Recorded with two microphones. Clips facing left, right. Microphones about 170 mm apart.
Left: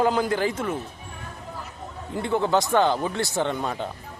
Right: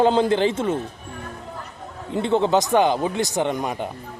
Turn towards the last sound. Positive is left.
turn(degrees=-15)  # may be behind; listen again after turning